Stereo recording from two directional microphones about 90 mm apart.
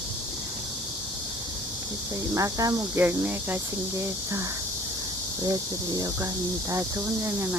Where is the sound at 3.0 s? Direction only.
20° right (ahead or behind).